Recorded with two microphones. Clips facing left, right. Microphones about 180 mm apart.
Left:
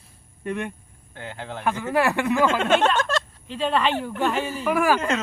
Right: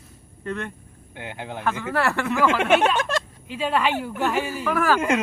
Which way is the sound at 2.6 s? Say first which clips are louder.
Right 1 dB; 10° right (ahead or behind).